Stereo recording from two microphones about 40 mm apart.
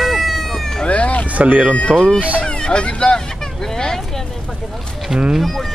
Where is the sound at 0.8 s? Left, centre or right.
Left.